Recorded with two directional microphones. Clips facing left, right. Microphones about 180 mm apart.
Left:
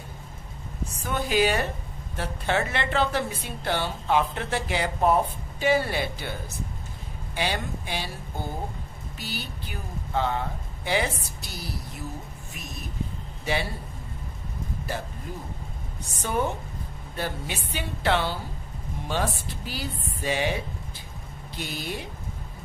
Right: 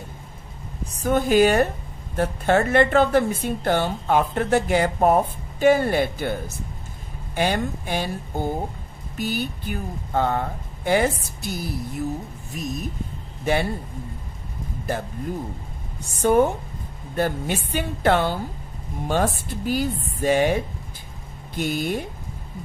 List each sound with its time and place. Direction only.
1.0 s a woman's voice: 45° right (ahead or behind)
7.3 s a woman's voice: 50° right (ahead or behind)
16.2 s a woman's voice: 50° right (ahead or behind)